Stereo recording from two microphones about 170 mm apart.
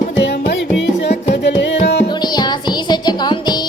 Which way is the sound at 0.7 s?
90° left.